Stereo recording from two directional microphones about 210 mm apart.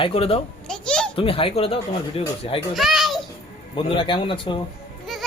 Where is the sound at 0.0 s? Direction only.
30° left (ahead or behind).